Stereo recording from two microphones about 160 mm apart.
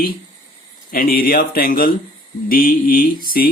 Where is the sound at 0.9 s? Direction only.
65° left (ahead or behind).